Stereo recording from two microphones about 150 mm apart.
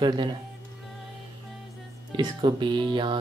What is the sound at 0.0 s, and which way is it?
Speech, 30° right (ahead or behind).